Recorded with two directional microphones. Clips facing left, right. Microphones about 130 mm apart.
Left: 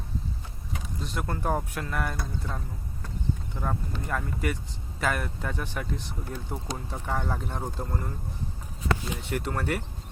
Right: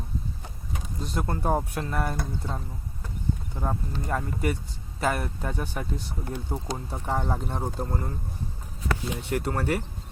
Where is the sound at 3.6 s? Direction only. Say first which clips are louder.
Right 1 dB; 25° right (ahead or behind).